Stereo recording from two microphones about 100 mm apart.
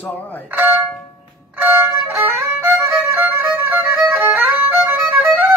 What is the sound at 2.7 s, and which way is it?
Violin, 30° right (ahead or behind).